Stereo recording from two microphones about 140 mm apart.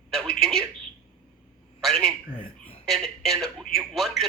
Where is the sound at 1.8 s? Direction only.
5° left (ahead or behind).